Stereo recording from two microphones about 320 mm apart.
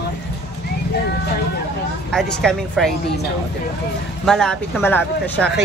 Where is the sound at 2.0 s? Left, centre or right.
Centre.